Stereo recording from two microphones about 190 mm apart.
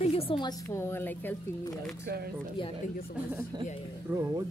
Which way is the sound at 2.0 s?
55° right (ahead or behind).